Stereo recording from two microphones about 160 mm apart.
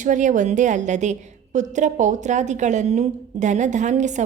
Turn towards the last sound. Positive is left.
turn(degrees=-50)  # may be behind; listen again after turning